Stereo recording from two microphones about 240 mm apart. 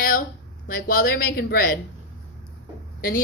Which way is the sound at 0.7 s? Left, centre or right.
Left.